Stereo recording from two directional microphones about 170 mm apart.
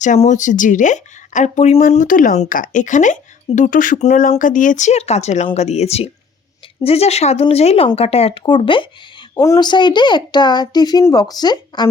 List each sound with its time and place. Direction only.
0.0 s a child's voice: 45° left (ahead or behind); by 11.9 s 25° left (ahead or behind)